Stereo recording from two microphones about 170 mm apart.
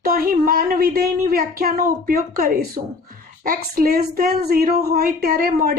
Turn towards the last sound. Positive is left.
turn(degrees=-60)  # may be behind; listen again after turning